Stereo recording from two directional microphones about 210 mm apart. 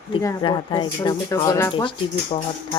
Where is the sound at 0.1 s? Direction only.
20° left (ahead or behind).